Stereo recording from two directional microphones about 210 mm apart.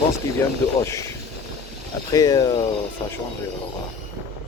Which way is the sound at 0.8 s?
15° left (ahead or behind).